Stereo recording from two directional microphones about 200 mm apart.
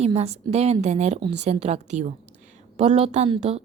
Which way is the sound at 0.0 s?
30° right (ahead or behind).